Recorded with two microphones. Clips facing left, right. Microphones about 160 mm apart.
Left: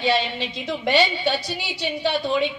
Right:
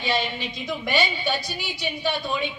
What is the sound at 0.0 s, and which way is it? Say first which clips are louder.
A woman's voice: left 4 dB; 90° left.